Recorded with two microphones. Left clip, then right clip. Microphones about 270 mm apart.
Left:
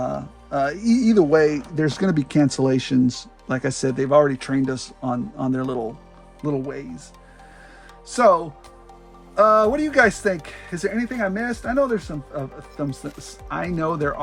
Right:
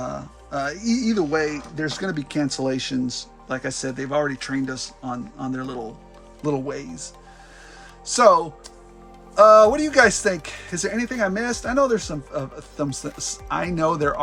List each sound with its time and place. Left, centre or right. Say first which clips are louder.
0.0 s speech: left 4 dB; centre
6.4 s speech: right 1 dB; centre